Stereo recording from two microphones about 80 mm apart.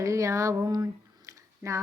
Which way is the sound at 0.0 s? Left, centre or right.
Right.